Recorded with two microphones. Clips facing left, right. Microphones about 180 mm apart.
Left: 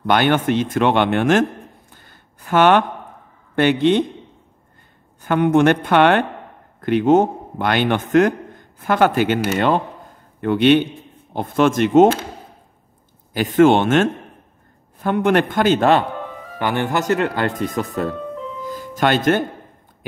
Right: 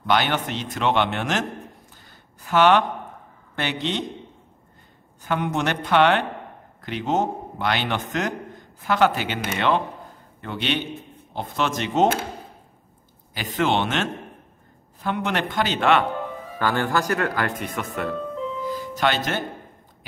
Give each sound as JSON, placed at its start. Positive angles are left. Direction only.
{"t": 0.1, "sound": "speech", "side_deg": 55}
{"t": 2.0, "sound": "a sound", "side_deg": 55}
{"t": 3.5, "sound": "a man's voice", "side_deg": 55}
{"t": 5.2, "sound": "a man's voice", "side_deg": 55}
{"t": 10.4, "sound": "a man's voice", "side_deg": 55}
{"t": 13.3, "sound": "a man's voice", "side_deg": 50}
{"t": 16.5, "sound": "speech", "side_deg": 20}
{"t": 18.7, "sound": "music", "side_deg": 50}